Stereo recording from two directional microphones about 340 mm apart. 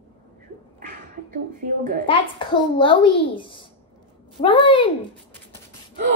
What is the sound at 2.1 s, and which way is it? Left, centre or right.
A child's voice, centre.